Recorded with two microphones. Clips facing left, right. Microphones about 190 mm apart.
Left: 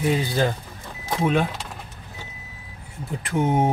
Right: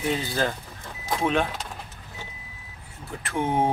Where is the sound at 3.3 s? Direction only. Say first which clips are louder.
Left 3 dB; 15° left (ahead or behind).